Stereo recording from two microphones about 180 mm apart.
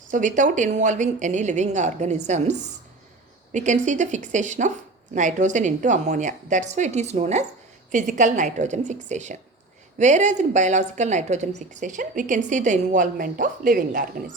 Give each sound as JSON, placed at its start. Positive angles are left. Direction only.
{"t": 0.1, "sound": "a woman's voice", "side_deg": -45}